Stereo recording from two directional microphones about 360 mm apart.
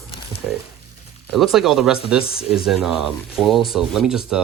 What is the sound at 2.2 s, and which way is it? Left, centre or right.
Speech, left.